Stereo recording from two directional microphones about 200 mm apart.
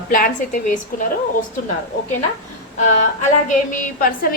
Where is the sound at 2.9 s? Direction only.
35° left (ahead or behind).